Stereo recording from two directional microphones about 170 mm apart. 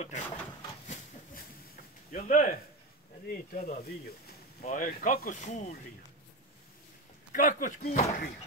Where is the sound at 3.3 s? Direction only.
60° left (ahead or behind).